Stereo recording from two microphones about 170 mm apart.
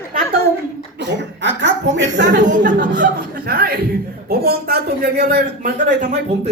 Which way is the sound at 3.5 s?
65° right (ahead or behind).